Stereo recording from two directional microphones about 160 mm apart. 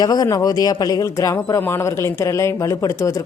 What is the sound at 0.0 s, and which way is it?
A man's voice, 25° left (ahead or behind).